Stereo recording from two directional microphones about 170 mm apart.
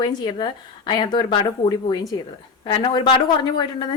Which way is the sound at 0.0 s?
25° left (ahead or behind).